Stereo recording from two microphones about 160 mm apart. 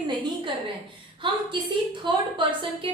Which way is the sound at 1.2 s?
30° right (ahead or behind).